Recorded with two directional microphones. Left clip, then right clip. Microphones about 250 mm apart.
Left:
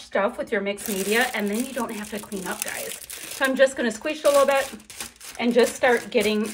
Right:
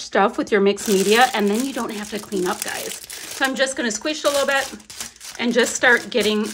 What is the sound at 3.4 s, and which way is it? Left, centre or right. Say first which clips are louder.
Speech: left 1 dB; centre.